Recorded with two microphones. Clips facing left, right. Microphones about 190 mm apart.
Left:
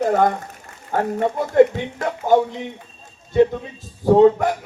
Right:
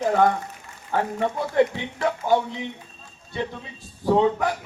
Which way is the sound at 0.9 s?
45° left (ahead or behind).